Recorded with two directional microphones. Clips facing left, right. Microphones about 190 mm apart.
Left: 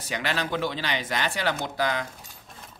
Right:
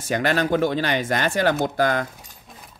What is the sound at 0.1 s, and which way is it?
Cutlery, 50° right (ahead or behind).